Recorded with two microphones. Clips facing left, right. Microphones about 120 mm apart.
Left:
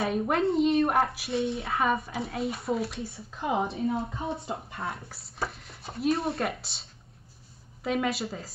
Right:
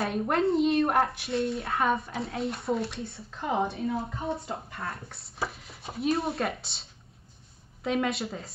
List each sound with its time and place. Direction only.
0.0 s speech: centre (ahead or behind)
4.5 s speech: 25° left (ahead or behind)
4.8 s speech: centre (ahead or behind)